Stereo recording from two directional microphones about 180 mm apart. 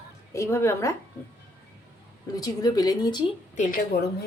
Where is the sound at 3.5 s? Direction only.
45° left (ahead or behind).